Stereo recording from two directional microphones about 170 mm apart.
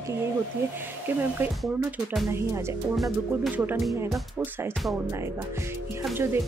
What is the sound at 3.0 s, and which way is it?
Music, centre (ahead or behind).